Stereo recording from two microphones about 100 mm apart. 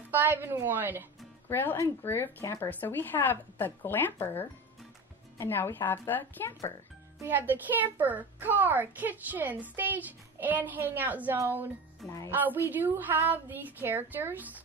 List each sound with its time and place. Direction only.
0.1 s speech: 20° right (ahead or behind)
1.5 s speech: 20° left (ahead or behind)
7.2 s a child's voice: 20° right (ahead or behind)